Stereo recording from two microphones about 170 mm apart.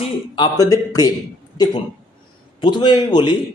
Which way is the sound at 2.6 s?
25° left (ahead or behind).